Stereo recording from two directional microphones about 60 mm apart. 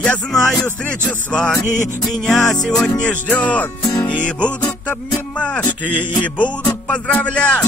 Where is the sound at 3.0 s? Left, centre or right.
Left.